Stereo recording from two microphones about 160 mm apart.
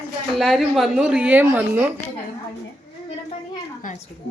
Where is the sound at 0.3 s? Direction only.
Centre (ahead or behind).